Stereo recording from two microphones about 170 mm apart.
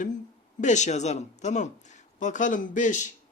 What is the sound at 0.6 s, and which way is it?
Speech, 45° left (ahead or behind).